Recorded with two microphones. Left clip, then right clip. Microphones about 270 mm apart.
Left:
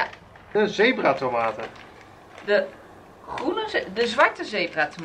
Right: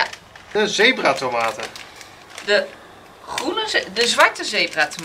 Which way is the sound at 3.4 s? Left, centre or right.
Centre.